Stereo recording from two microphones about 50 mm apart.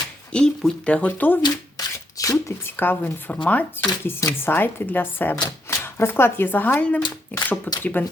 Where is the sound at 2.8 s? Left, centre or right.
Left.